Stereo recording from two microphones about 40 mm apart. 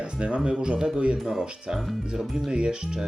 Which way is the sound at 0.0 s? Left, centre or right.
Right.